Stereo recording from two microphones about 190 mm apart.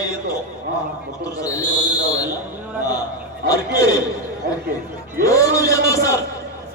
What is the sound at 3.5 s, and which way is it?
Speech, 20° left (ahead or behind).